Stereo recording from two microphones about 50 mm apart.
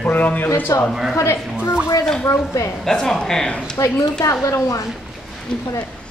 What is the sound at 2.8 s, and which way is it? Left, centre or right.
Speech, centre.